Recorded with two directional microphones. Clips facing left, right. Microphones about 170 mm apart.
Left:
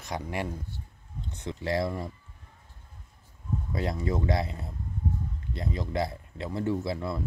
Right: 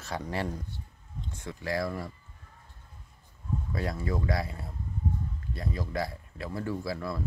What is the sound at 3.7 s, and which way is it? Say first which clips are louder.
Speech: left 3 dB; 20° left (ahead or behind).